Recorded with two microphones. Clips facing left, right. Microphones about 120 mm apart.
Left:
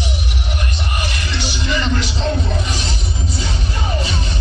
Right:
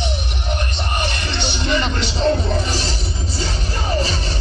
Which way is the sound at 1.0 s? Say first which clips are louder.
Right 1 dB; 30° right (ahead or behind).